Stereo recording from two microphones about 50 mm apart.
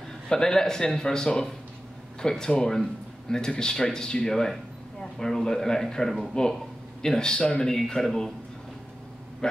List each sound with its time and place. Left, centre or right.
0.3 s speech: centre
9.4 s speech: centre